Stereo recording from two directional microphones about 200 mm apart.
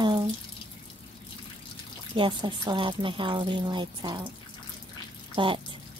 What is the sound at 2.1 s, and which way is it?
A woman's voice, 25° right (ahead or behind).